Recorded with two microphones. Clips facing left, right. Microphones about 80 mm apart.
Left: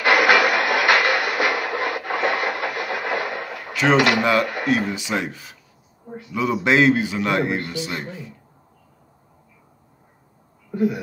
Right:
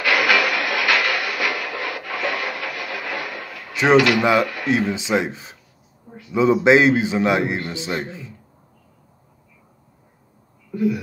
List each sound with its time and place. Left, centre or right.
0.0 s train: left
3.9 s speech: left
4.2 s a man's voice: right
6.0 s a sound: left
6.3 s a man's voice: right
10.7 s a sound: left